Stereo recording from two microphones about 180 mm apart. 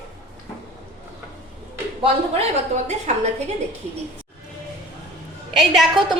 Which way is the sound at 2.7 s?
40° right (ahead or behind).